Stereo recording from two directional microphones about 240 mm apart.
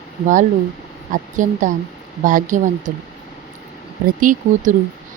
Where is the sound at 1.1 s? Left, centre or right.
Right.